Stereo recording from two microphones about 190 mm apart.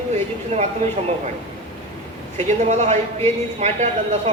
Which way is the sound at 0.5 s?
35° right (ahead or behind).